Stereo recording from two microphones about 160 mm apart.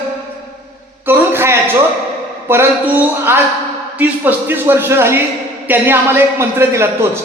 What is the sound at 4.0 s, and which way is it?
A man's voice, 10° right (ahead or behind).